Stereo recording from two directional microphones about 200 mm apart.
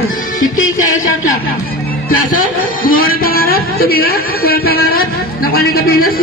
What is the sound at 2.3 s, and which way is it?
A woman's voice, 45° left (ahead or behind).